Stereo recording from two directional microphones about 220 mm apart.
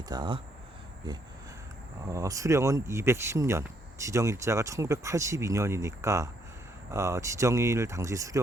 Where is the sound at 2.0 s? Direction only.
15° right (ahead or behind).